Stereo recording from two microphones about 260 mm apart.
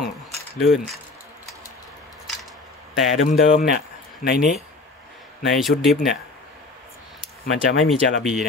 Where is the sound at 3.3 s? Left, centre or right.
Left.